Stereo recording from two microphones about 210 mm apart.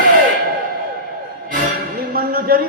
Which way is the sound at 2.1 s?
45° right (ahead or behind).